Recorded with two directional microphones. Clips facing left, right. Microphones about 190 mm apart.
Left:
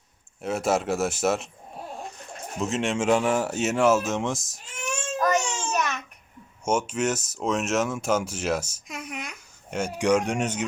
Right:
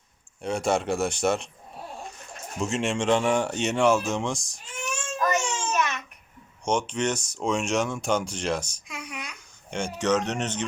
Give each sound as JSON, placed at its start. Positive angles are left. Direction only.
{"t": 0.4, "sound": "speech", "side_deg": 5}
{"t": 2.6, "sound": "speech", "side_deg": 0}
{"t": 5.2, "sound": "babbling", "side_deg": 40}
{"t": 6.7, "sound": "speech", "side_deg": 5}
{"t": 8.9, "sound": "a sound", "side_deg": 50}
{"t": 9.6, "sound": "speech", "side_deg": 5}